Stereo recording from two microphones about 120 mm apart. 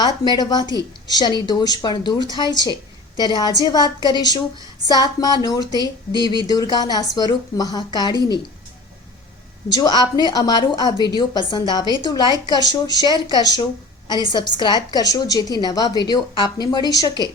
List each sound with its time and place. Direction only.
0.0 s a woman's voice: 35° left (ahead or behind)
9.6 s a woman's voice: 35° left (ahead or behind)